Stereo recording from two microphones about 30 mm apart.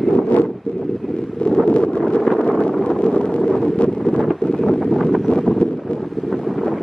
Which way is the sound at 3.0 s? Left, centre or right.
Left.